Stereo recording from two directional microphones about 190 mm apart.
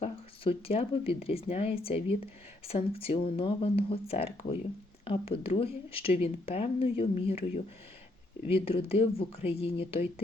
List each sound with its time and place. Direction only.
0.0 s speech: 30° left (ahead or behind)